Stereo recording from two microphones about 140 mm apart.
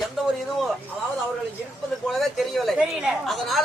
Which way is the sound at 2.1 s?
Centre (ahead or behind).